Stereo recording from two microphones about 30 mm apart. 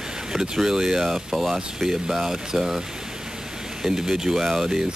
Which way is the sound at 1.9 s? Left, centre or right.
Centre.